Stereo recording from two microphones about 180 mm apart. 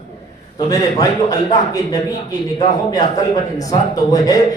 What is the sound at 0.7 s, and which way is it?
A man's voice, 20° left (ahead or behind).